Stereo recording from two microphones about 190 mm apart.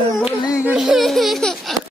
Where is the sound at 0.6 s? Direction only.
5° right (ahead or behind).